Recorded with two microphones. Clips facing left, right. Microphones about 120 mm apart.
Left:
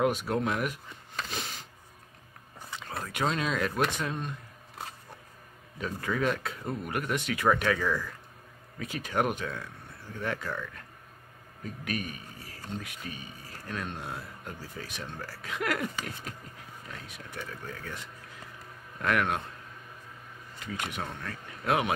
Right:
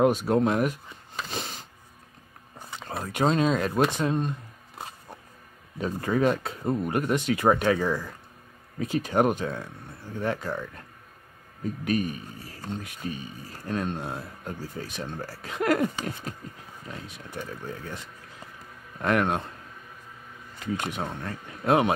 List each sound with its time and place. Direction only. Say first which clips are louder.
0.0 s speech: right 6 dB; 30° right (ahead or behind)
1.3 s vehicle: right 4 dB; 30° right (ahead or behind)
3.0 s speech: right 7 dB; 30° right (ahead or behind)
5.8 s speech: right 6 dB; 30° right (ahead or behind)
18.9 s speech: right 4 dB; 30° right (ahead or behind)
20.7 s speech: right 5 dB; 30° right (ahead or behind)